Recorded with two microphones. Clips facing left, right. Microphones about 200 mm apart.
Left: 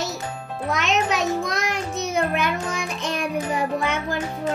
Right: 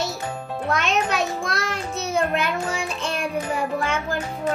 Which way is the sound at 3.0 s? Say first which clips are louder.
Even; 15° left (ahead or behind).